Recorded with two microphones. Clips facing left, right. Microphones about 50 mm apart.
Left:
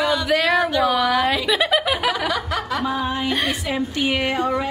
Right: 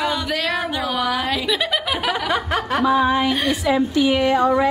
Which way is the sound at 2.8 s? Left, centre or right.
Right.